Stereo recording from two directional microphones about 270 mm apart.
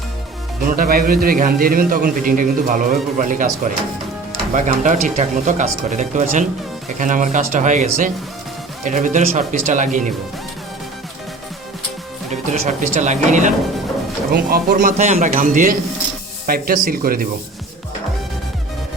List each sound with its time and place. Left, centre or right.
0.6 s a man's voice: right
12.3 s a man's voice: right